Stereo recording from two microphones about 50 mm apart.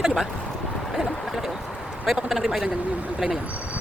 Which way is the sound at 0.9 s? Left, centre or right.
Centre.